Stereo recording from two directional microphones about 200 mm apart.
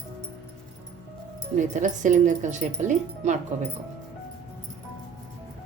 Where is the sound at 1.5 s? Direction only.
40° right (ahead or behind).